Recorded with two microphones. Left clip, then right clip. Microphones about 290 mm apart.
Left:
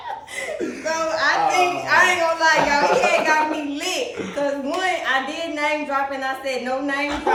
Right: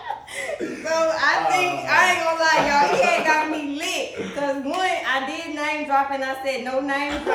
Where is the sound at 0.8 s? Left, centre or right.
Centre.